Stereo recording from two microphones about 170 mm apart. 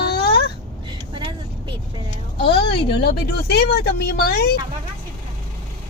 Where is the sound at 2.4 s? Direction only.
75° left (ahead or behind).